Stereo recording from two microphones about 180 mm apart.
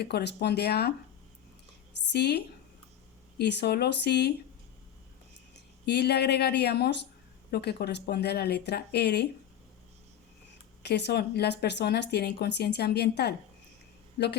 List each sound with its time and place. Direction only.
0.0 s speech: 65° left (ahead or behind)
2.0 s speech: 70° left (ahead or behind)
5.5 s speech: 70° left (ahead or behind)
10.8 s speech: 70° left (ahead or behind)